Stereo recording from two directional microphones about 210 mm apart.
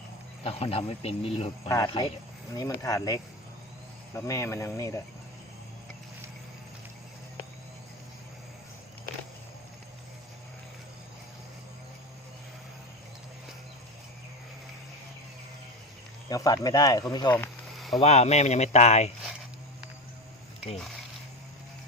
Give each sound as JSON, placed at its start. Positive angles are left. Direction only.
{"t": 0.4, "sound": "speech", "side_deg": 30}
{"t": 16.3, "sound": "speech", "side_deg": 15}
{"t": 17.7, "sound": "a sound", "side_deg": 0}
{"t": 18.0, "sound": "speech", "side_deg": 30}